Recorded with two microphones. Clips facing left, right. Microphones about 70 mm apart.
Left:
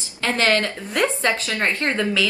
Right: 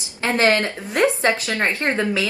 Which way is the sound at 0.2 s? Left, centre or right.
Right.